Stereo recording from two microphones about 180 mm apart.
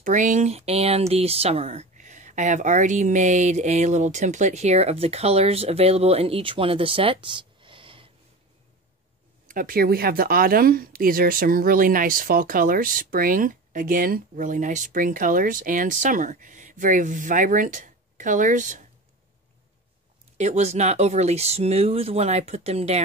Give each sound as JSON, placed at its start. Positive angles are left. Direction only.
{"t": 0.0, "sound": "speech", "side_deg": -45}
{"t": 9.5, "sound": "speech", "side_deg": -50}
{"t": 20.3, "sound": "speech", "side_deg": -40}